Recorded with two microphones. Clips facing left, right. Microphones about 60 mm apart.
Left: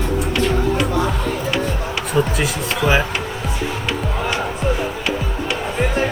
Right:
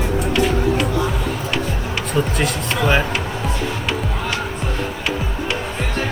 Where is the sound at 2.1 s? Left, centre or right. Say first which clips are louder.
Left 1 dB; centre.